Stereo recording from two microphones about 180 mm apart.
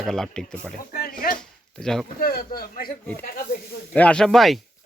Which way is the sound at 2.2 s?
55° left (ahead or behind).